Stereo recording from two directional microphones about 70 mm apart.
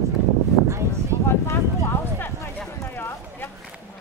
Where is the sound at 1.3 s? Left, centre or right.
Left.